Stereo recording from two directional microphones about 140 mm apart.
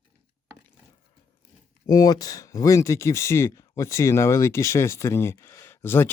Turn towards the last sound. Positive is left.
turn(degrees=15)  # may be behind; listen again after turning